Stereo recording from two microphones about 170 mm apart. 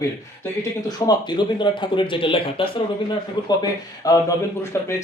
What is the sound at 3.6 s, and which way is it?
Speech, 20° left (ahead or behind).